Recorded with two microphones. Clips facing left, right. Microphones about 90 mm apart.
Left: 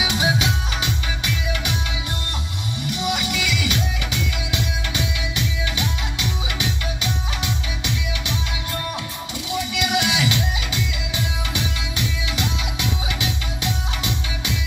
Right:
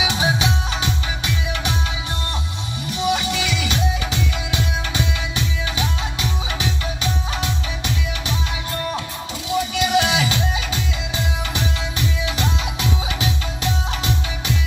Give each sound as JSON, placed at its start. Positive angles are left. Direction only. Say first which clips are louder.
{"t": 0.0, "sound": "music", "louder": "right 1 dB", "side_deg": -30}
{"t": 2.9, "sound": "music", "louder": "right 4 dB", "side_deg": -35}
{"t": 9.5, "sound": "music", "louder": "right 4 dB", "side_deg": -35}